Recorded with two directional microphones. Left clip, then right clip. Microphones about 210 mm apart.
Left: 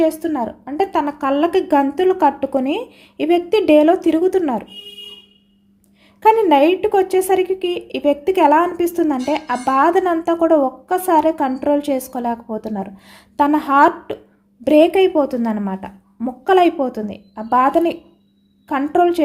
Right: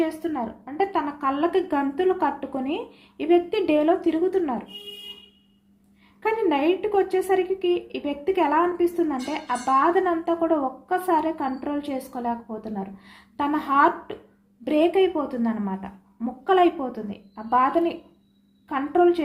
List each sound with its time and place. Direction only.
0.0 s speech: 55° left (ahead or behind)
6.2 s speech: 55° left (ahead or behind)